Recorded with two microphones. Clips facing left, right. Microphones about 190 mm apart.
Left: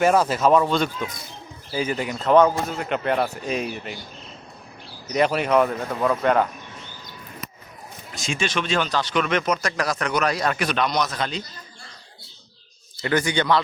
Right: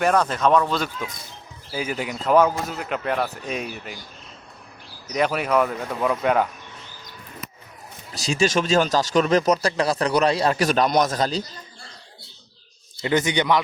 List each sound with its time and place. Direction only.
0.0 s a man's voice: 5° left (ahead or behind)
5.0 s a man's voice: centre (ahead or behind)
8.1 s a man's voice: 35° right (ahead or behind)
10.7 s a man's voice: 45° right (ahead or behind)
13.0 s a man's voice: 20° right (ahead or behind)